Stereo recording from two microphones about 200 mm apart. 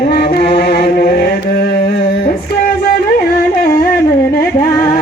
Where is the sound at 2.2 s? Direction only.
45° left (ahead or behind).